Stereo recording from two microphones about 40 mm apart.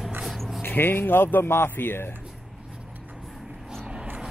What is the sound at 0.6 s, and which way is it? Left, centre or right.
Speech, left.